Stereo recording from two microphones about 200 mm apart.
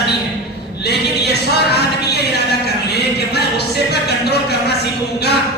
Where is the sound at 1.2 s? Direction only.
55° left (ahead or behind).